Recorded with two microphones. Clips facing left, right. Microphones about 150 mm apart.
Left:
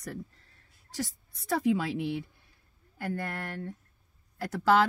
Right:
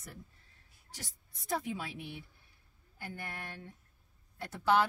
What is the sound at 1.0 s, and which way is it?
Speech, 90° left.